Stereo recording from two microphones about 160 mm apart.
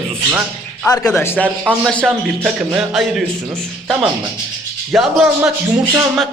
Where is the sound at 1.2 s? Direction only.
15° left (ahead or behind); by 3.2 s centre (ahead or behind).